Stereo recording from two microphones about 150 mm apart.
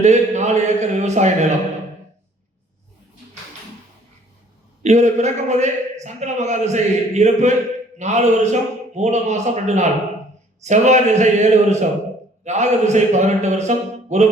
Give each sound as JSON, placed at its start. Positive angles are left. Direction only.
{"t": 0.0, "sound": "a man's voice", "side_deg": -50}
{"t": 4.8, "sound": "a man's voice", "side_deg": -50}